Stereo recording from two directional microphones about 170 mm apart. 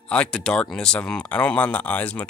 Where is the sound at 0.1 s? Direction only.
5° left (ahead or behind).